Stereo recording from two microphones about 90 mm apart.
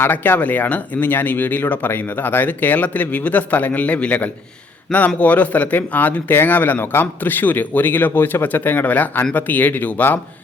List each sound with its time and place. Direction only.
0.0 s speech: 25° left (ahead or behind)